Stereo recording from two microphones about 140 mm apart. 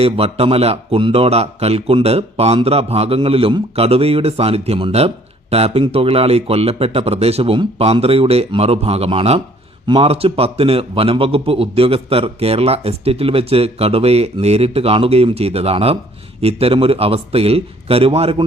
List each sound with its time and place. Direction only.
0.0 s a man's voice: 45° right (ahead or behind)